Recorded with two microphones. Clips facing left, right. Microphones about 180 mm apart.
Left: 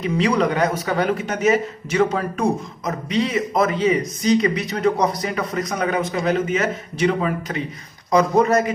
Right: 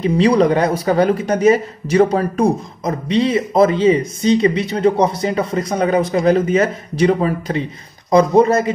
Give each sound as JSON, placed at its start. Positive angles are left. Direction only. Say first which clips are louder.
{"t": 0.0, "sound": "speech", "louder": "right 6 dB", "side_deg": -35}